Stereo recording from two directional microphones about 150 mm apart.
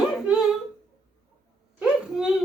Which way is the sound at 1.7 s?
5° right (ahead or behind).